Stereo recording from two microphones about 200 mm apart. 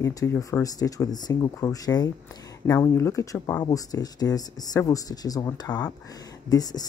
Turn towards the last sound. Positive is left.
turn(degrees=20)  # may be behind; listen again after turning